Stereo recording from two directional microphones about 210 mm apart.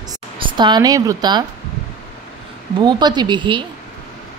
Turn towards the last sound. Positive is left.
turn(degrees=-25)  # may be behind; listen again after turning